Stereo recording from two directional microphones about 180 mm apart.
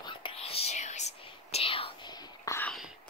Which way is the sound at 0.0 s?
30° left (ahead or behind).